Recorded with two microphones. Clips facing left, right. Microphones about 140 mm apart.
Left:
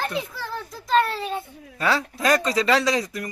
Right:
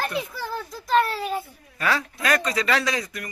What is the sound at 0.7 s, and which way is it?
Speech, centre (ahead or behind).